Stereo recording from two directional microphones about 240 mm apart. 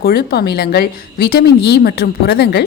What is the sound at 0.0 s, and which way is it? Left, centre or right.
A woman's voice, left.